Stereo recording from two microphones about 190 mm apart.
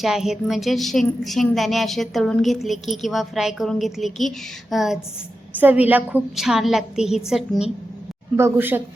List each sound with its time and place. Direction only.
0.0 s a woman's voice: centre (ahead or behind)
8.4 s speech: 10° right (ahead or behind)